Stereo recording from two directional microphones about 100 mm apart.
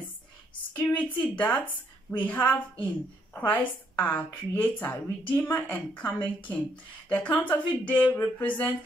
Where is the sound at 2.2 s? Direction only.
15° left (ahead or behind).